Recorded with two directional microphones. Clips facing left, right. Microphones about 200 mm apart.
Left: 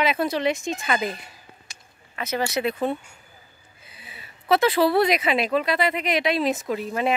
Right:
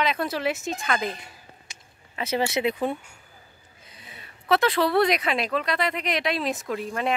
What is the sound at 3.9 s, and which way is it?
Speech, 5° left (ahead or behind).